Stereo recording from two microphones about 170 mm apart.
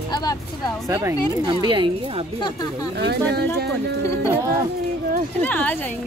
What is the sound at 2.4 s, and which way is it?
Speech, 25° left (ahead or behind).